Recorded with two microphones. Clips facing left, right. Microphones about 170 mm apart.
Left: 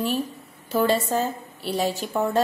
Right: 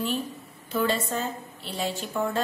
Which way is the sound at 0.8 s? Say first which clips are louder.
Left 5 dB; 35° left (ahead or behind).